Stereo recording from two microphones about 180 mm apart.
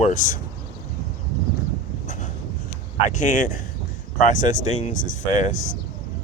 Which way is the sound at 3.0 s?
45° left (ahead or behind).